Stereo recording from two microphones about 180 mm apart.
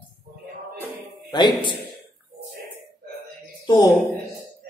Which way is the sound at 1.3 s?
25° left (ahead or behind).